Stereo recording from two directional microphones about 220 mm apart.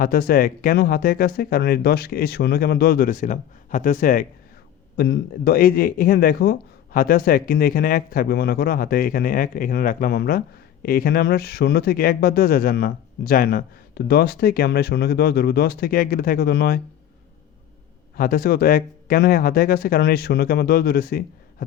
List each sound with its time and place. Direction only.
0.0 s speech: 40° left (ahead or behind)
18.2 s speech: 40° left (ahead or behind)